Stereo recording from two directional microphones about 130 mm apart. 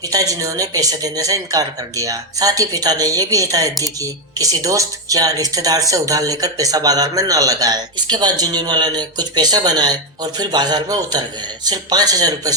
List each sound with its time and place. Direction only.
0.1 s speech: 25° right (ahead or behind)